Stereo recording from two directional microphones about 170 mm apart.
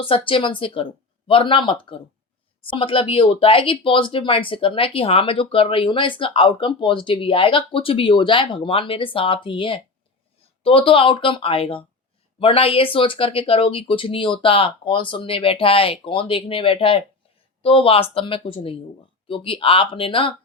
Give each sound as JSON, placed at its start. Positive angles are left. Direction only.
{"t": 0.0, "sound": "speech", "side_deg": 30}